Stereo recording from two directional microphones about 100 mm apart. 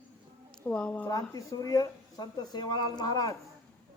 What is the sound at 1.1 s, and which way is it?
Speech, 35° left (ahead or behind).